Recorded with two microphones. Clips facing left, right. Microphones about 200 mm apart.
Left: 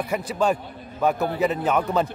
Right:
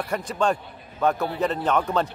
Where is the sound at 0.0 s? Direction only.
5° left (ahead or behind).